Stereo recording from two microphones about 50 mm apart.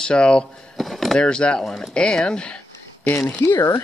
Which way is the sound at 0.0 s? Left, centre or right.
Centre.